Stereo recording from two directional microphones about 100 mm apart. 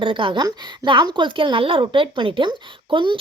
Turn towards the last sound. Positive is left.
turn(degrees=-55)  # may be behind; listen again after turning